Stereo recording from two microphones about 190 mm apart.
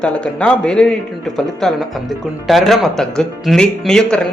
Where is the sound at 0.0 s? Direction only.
5° left (ahead or behind).